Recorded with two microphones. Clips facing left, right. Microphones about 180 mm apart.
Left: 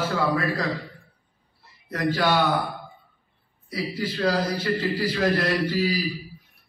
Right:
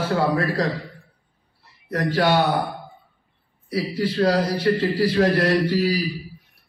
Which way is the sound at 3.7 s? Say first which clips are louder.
Right 5 dB; 35° right (ahead or behind).